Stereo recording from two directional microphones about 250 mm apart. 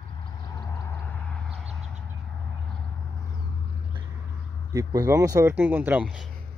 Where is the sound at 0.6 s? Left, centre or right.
Centre.